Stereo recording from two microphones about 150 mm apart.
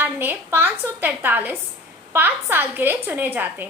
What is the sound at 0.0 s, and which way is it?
A woman's voice, 15° right (ahead or behind).